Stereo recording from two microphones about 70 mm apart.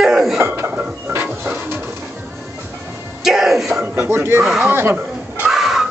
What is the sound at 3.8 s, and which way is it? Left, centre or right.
A man's voice, right.